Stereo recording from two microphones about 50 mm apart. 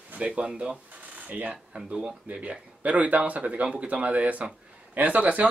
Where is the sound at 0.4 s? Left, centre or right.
Right.